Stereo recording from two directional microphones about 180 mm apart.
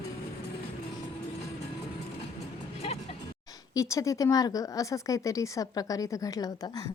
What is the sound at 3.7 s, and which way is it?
Speech, 20° left (ahead or behind).